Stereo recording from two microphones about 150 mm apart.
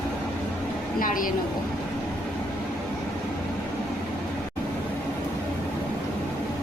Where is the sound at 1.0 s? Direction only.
65° left (ahead or behind).